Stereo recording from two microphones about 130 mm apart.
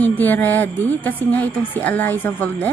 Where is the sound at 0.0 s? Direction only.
15° left (ahead or behind).